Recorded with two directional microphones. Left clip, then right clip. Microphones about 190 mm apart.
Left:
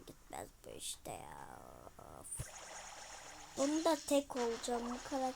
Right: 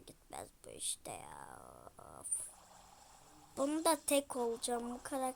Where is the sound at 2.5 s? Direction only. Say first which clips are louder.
Left 9 dB; 45° left (ahead or behind).